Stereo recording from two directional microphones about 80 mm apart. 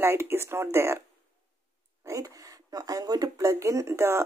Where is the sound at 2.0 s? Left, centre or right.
Right.